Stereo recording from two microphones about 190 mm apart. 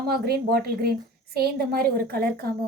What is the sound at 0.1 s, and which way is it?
A woman's voice, 55° right (ahead or behind).